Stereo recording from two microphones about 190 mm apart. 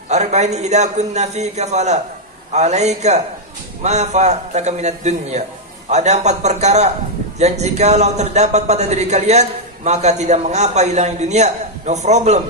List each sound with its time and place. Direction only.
0.1 s a man's voice: 35° right (ahead or behind)